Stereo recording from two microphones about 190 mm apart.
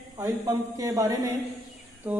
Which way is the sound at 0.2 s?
15° right (ahead or behind).